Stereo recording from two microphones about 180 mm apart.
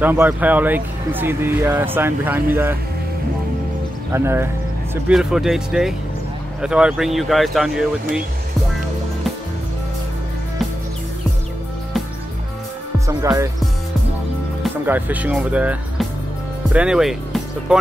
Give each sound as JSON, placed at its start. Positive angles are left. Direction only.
{"t": 0.0, "sound": "speech", "side_deg": -10}
{"t": 4.1, "sound": "speech", "side_deg": -15}
{"t": 5.0, "sound": "speech", "side_deg": -5}
{"t": 13.0, "sound": "music", "side_deg": -20}
{"t": 14.9, "sound": "speech", "side_deg": -10}